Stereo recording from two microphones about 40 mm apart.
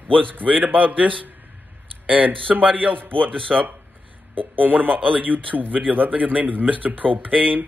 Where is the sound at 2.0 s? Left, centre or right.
Right.